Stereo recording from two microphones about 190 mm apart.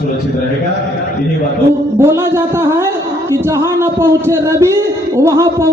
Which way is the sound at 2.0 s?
10° right (ahead or behind).